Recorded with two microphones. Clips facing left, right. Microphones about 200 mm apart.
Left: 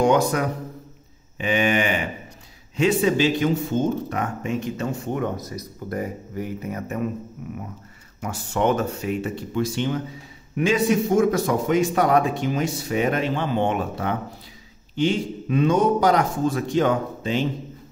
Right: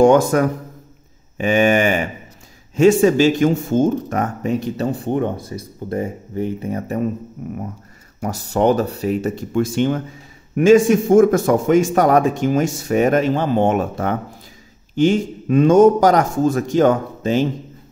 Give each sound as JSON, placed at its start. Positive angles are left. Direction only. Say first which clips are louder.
{"t": 0.0, "sound": "a man's voice", "louder": "right 7 dB", "side_deg": -45}